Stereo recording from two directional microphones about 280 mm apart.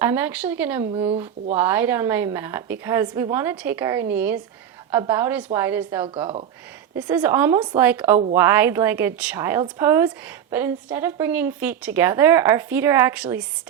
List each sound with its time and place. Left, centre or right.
0.0 s a woman's voice: centre
0.9 s speech: right
1.5 s a woman's voice: centre